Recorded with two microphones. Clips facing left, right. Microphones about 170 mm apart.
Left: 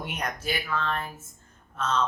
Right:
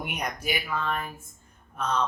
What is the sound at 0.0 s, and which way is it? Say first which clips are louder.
Speech: even; 10° right (ahead or behind).